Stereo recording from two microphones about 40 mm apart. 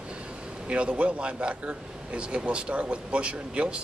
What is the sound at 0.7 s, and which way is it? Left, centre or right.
A man's voice, right.